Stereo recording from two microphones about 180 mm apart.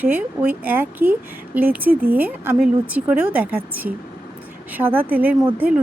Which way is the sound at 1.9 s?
55° right (ahead or behind).